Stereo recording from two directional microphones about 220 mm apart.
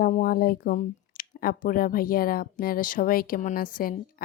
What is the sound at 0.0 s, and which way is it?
Speech, 40° left (ahead or behind).